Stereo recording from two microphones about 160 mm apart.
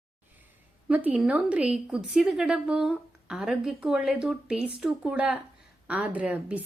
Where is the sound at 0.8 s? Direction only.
10° right (ahead or behind).